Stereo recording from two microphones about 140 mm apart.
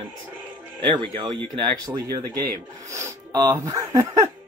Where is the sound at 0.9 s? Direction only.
35° right (ahead or behind).